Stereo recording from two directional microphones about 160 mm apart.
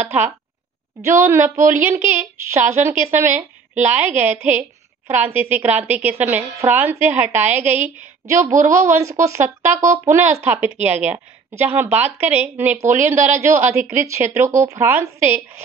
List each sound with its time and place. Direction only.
0.0 s a woman's voice: 10° right (ahead or behind)